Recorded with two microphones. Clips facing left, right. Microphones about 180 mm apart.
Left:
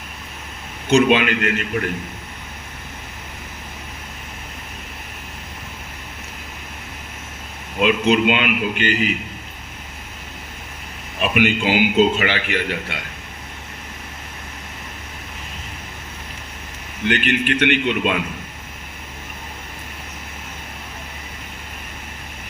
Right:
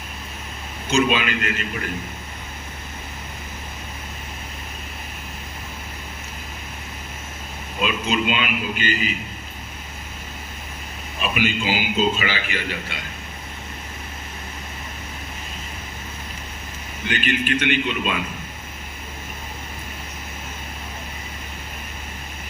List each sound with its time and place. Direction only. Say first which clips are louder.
0.9 s a man's voice: left 5 dB; 65° left (ahead or behind)
7.8 s a man's voice: left 7 dB; 65° left (ahead or behind)
11.2 s a man's voice: left 5 dB; 60° left (ahead or behind)
17.1 s a man's voice: left 3 dB; 65° left (ahead or behind)